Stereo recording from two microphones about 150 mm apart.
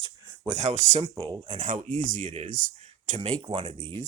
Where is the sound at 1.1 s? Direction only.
30° right (ahead or behind).